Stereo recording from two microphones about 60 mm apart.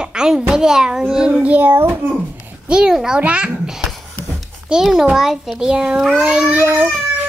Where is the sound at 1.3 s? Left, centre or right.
Right.